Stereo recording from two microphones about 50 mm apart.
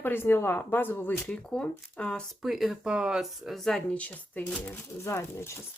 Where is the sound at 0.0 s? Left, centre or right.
Left.